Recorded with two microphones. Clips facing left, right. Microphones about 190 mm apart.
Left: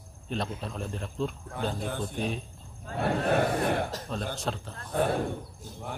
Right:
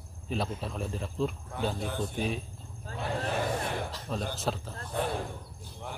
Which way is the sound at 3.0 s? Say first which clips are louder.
Left 6 dB; 65° left (ahead or behind).